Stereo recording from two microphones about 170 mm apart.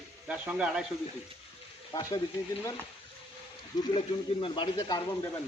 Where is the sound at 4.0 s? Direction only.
30° left (ahead or behind).